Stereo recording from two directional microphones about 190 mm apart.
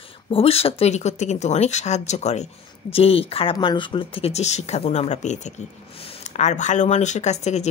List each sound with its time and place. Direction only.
0.3 s speech: 30° left (ahead or behind)